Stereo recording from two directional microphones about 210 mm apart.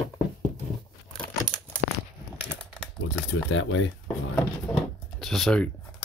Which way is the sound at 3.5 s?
65° left (ahead or behind).